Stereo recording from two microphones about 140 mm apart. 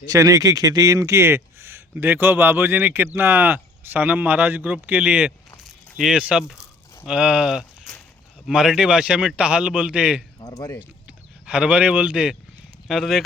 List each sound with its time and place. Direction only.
0.1 s speech: 25° right (ahead or behind); by 10.2 s 5° right (ahead or behind)
10.4 s speech: 25° left (ahead or behind)
11.4 s speech: 5° right (ahead or behind)